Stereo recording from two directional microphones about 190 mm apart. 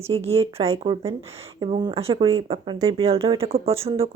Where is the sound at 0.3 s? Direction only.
30° right (ahead or behind).